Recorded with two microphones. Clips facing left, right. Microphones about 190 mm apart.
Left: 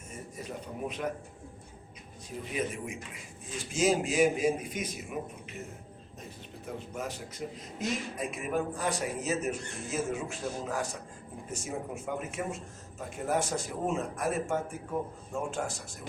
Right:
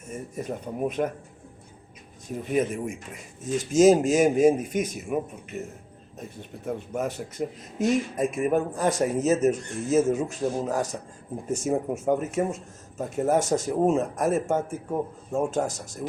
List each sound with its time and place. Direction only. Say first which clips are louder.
0.3 s speech: right 8 dB; 50° right (ahead or behind)
2.5 s speech: right 9 dB; 45° right (ahead or behind)
6.7 s a man's voice: right 8 dB; 55° right (ahead or behind)